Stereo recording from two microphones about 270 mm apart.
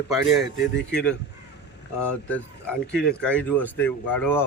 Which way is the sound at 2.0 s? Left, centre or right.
Centre.